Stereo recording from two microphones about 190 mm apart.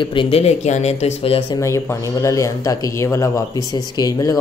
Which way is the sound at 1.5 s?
15° left (ahead or behind).